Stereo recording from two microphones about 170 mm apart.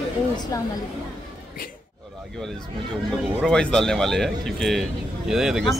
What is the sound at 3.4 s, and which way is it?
Speech, 5° left (ahead or behind).